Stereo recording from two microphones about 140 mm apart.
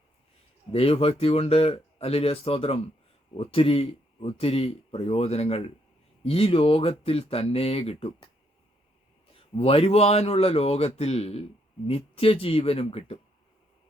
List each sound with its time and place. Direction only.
0.7 s speech: 45° left (ahead or behind)
9.3 s speech: 45° left (ahead or behind)